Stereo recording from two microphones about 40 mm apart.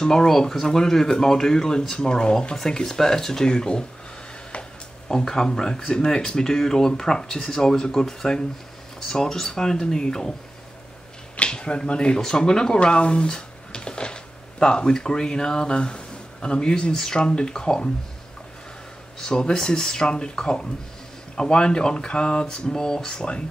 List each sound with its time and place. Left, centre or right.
0.0 s speech: centre
11.3 s speech: left
19.1 s speech: centre